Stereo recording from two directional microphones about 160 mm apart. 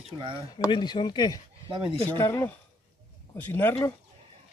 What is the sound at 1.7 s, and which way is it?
Speech, 35° right (ahead or behind).